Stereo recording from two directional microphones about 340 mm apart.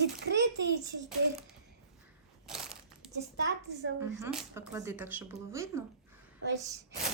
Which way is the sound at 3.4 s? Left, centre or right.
Right.